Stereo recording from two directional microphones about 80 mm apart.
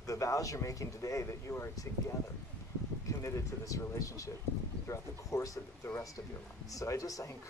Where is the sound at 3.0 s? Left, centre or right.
Left.